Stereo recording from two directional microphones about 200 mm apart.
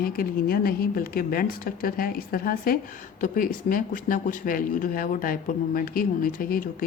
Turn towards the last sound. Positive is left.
turn(degrees=45)  # may be behind; listen again after turning